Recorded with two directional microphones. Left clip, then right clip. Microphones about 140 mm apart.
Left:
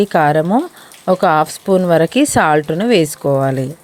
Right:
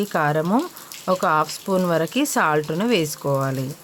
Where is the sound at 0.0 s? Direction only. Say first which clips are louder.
Left 9 dB; 40° left (ahead or behind).